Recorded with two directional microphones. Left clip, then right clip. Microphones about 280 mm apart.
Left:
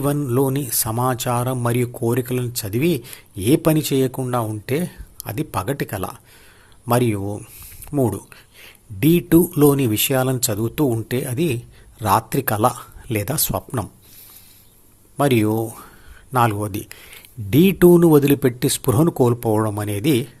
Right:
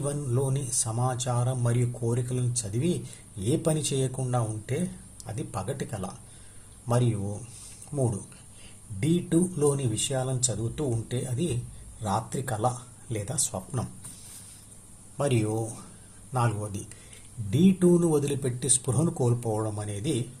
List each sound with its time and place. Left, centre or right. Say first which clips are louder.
0.0 s speech: left 11 dB; left
9.0 s speech: left 11 dB; left
15.2 s speech: left 10 dB; left